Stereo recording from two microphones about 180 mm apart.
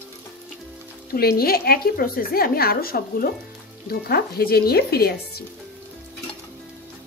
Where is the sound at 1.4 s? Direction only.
55° left (ahead or behind).